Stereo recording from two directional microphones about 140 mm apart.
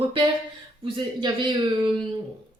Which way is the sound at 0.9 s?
35° right (ahead or behind).